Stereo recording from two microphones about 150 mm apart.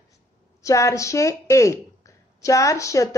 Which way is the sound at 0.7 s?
20° left (ahead or behind).